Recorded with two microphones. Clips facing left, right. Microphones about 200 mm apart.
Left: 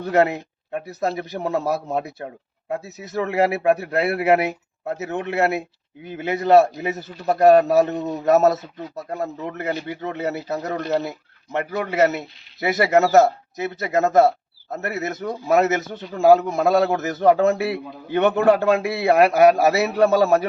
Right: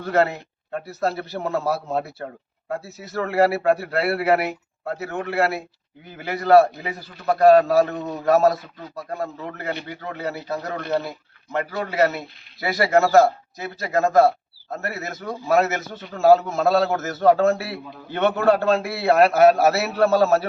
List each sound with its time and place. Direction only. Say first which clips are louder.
0.0 s a man's voice: left 2 dB; 15° left (ahead or behind)